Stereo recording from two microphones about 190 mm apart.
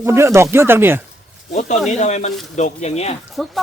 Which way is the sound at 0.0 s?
15° right (ahead or behind).